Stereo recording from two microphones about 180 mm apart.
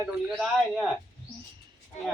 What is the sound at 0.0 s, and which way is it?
Speech, 5° right (ahead or behind).